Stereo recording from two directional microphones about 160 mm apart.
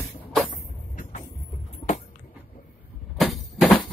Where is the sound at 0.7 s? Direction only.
55° left (ahead or behind).